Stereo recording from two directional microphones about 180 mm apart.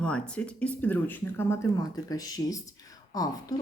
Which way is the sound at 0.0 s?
5° left (ahead or behind).